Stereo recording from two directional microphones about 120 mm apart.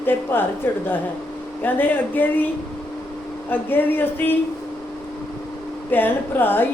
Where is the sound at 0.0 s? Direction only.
15° left (ahead or behind).